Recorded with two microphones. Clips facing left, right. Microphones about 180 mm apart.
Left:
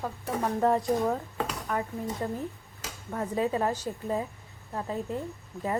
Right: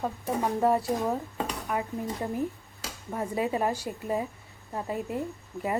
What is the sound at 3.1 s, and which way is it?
Speech, 15° right (ahead or behind).